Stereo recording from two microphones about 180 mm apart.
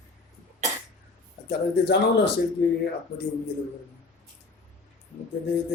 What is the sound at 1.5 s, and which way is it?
Speech, 70° left (ahead or behind).